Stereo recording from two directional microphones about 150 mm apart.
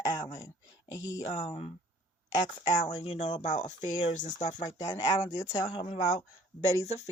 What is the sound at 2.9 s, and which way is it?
Speech, 30° left (ahead or behind).